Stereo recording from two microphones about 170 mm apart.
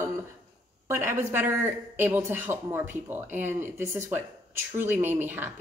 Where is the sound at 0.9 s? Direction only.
15° right (ahead or behind).